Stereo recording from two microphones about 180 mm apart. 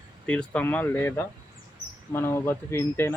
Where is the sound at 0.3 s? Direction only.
5° left (ahead or behind).